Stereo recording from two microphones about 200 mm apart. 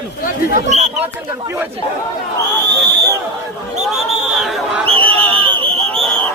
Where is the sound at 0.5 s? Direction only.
35° right (ahead or behind).